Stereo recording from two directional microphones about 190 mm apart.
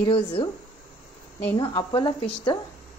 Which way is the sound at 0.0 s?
30° left (ahead or behind).